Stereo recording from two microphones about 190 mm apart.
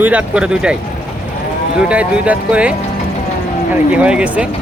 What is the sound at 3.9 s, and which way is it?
Speech, 5° right (ahead or behind).